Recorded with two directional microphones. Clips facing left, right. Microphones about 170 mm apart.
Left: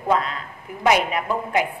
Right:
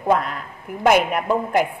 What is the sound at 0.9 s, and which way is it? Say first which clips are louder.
Speech: right 3 dB; 50° right (ahead or behind).